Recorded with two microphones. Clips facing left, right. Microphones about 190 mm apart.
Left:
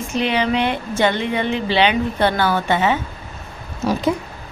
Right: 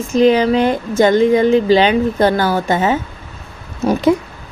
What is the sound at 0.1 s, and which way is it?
Speech, 40° right (ahead or behind).